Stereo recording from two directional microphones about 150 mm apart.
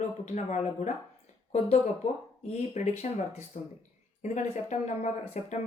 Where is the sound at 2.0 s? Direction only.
50° left (ahead or behind).